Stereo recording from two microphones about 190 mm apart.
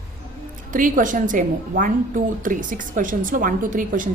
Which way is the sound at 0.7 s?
45° right (ahead or behind).